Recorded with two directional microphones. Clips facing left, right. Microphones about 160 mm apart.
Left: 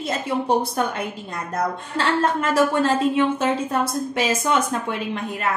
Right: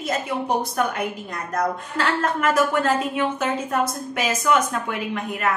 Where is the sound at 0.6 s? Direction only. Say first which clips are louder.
Even; 30° left (ahead or behind).